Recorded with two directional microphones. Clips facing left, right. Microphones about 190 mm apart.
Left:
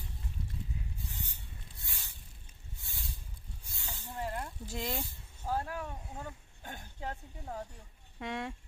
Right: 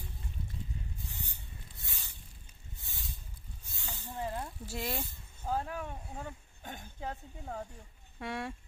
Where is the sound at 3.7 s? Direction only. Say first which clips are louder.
Right 1 dB; 15° right (ahead or behind).